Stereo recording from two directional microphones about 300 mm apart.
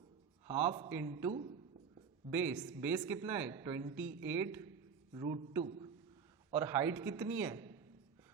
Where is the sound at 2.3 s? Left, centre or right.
Centre.